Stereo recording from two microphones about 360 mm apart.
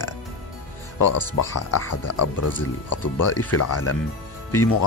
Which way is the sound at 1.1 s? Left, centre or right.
Left.